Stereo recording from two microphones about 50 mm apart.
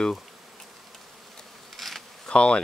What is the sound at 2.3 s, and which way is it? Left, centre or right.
Speech, centre.